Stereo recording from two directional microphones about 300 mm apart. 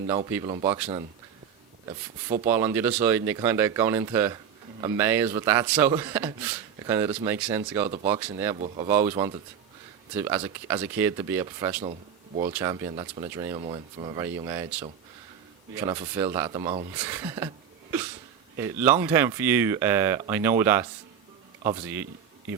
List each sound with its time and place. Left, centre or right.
0.4 s speech: centre
2.4 s speech: centre
8.5 s speech: right
8.9 s speech: centre
18.5 s speech: centre